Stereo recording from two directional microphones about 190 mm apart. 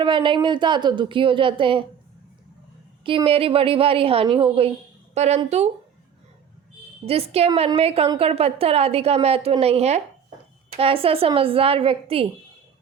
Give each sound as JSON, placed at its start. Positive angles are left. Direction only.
{"t": 0.0, "sound": "speech", "side_deg": -25}
{"t": 3.0, "sound": "a woman's voice", "side_deg": -25}
{"t": 7.0, "sound": "a woman's voice", "side_deg": -30}